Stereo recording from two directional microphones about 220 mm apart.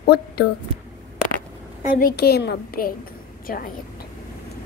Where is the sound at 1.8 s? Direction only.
40° left (ahead or behind).